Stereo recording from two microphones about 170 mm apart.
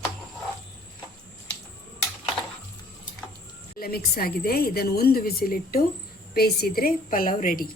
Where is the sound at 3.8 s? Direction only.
65° left (ahead or behind).